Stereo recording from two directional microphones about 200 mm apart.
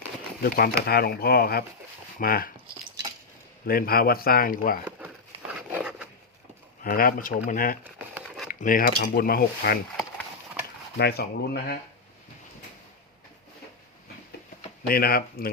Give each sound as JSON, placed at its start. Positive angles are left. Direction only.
{"t": 0.4, "sound": "speech", "side_deg": 50}
{"t": 3.7, "sound": "speech", "side_deg": 50}
{"t": 4.9, "sound": "a sound", "side_deg": -5}
{"t": 6.8, "sound": "speech", "side_deg": 45}
{"t": 10.9, "sound": "speech", "side_deg": 55}
{"t": 14.8, "sound": "speech", "side_deg": 45}